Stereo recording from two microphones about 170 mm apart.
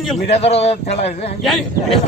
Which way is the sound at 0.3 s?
40° left (ahead or behind).